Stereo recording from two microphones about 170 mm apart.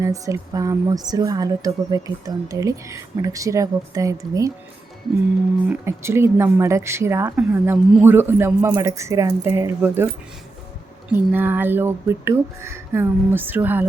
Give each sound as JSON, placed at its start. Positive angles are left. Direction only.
{"t": 0.0, "sound": "speech", "side_deg": -20}
{"t": 5.6, "sound": "a man's voice", "side_deg": -10}
{"t": 11.1, "sound": "a man's voice", "side_deg": -10}